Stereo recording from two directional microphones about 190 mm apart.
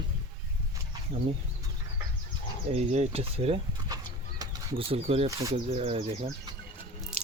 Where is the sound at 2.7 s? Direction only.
35° right (ahead or behind).